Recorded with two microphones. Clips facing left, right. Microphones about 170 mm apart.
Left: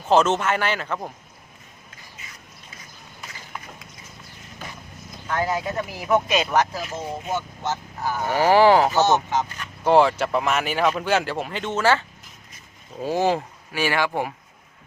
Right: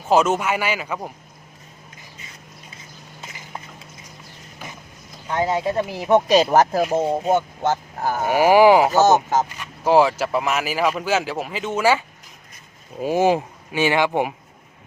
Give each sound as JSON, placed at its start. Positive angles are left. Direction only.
{"t": 0.0, "sound": "speech", "side_deg": -10}
{"t": 3.2, "sound": "a sound", "side_deg": -20}
{"t": 5.3, "sound": "speech", "side_deg": -25}
{"t": 6.7, "sound": "speech", "side_deg": -50}
{"t": 8.3, "sound": "speech", "side_deg": -10}
{"t": 8.9, "sound": "speech", "side_deg": -45}
{"t": 9.8, "sound": "speech", "side_deg": -5}